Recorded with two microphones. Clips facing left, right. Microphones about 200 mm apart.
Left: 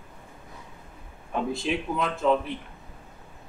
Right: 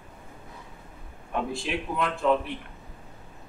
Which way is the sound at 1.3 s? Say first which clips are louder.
Left 2 dB; centre (ahead or behind).